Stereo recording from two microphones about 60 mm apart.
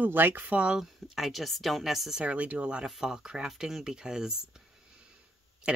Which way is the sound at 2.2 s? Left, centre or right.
Right.